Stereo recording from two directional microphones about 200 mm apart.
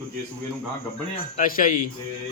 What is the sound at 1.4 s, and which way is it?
Speech, 45° left (ahead or behind).